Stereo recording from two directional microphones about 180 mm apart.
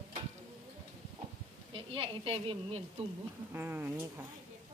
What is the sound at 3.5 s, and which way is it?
Speech, 10° right (ahead or behind).